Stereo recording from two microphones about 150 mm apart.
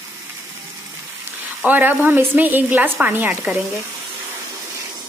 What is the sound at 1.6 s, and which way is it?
Speech, 10° right (ahead or behind).